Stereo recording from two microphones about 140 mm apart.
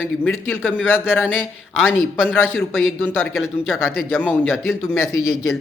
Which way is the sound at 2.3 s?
15° left (ahead or behind).